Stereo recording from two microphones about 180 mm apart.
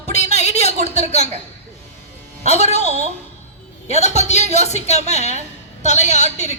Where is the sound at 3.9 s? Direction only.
40° left (ahead or behind).